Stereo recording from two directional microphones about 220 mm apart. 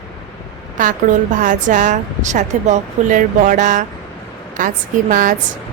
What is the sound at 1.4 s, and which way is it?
Speech, 35° right (ahead or behind).